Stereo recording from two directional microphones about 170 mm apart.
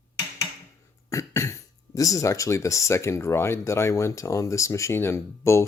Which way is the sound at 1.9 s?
20° left (ahead or behind).